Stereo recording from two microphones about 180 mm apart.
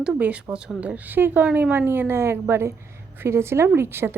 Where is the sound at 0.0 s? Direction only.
5° right (ahead or behind).